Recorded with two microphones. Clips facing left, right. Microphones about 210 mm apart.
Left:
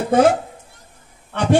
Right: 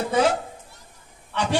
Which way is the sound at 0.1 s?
50° left (ahead or behind).